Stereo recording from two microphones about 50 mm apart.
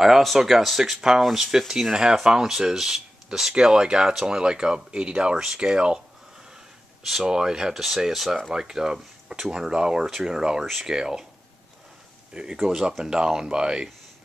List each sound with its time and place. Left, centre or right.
0.0 s speech: centre
7.2 s speech: centre
12.3 s speech: centre